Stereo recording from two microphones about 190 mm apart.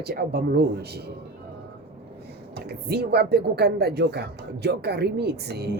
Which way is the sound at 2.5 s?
55° right (ahead or behind).